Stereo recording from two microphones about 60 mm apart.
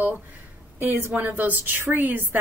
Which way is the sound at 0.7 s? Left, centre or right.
Right.